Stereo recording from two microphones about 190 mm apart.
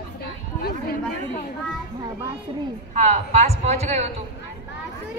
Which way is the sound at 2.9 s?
35° right (ahead or behind).